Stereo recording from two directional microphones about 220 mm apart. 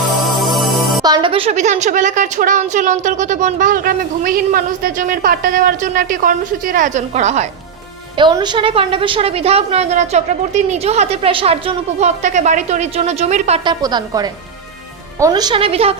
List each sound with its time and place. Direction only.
0.3 s music: centre (ahead or behind)
1.0 s a woman's voice: 20° right (ahead or behind)
8.2 s a woman's voice: 20° right (ahead or behind)
13.8 s a woman's voice: 15° right (ahead or behind)